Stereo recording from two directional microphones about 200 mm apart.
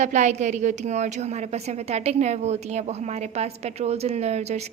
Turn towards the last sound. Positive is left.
turn(degrees=-35)  # may be behind; listen again after turning